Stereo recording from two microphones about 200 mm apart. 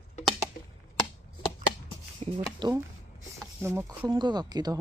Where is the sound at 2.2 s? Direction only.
30° right (ahead or behind).